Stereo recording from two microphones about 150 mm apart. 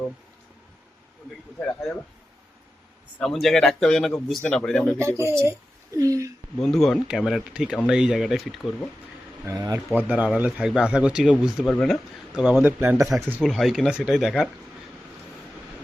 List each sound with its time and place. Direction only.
1.6 s speech: 5° left (ahead or behind)
3.2 s speech: centre (ahead or behind)
4.9 s speech: 20° right (ahead or behind)
6.6 s speech: centre (ahead or behind)
9.5 s speech: 20° right (ahead or behind)
10.0 s speech: 10° right (ahead or behind)
13.4 s speech: centre (ahead or behind)